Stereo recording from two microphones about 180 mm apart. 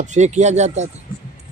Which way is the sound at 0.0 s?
40° right (ahead or behind).